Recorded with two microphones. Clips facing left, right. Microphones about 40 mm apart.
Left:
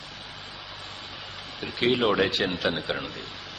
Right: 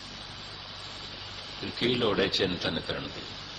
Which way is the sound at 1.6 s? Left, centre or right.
Left.